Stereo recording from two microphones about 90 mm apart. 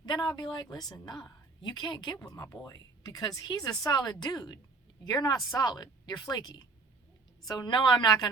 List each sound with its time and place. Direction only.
0.0 s a woman's voice: 55° left (ahead or behind)
2.2 s a woman's voice: 45° left (ahead or behind); by 8.1 s 60° left (ahead or behind)